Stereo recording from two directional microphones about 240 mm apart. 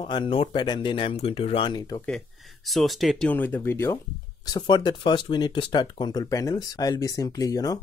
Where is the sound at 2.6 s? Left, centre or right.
Centre.